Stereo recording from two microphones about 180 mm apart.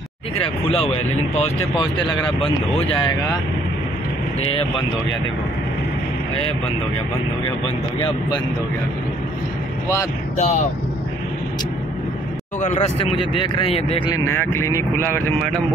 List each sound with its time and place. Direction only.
0.4 s speech: 35° left (ahead or behind)
10.3 s speech: 40° left (ahead or behind)
12.5 s speech: 40° left (ahead or behind)
14.2 s speech: 15° left (ahead or behind)